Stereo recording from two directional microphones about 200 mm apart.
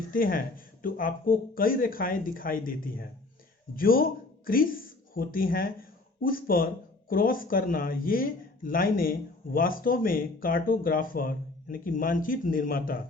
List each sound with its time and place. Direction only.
0.1 s speech: 45° left (ahead or behind)